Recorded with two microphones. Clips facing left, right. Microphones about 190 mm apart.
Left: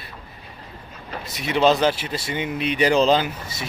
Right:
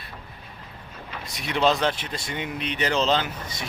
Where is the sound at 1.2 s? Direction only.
Centre (ahead or behind).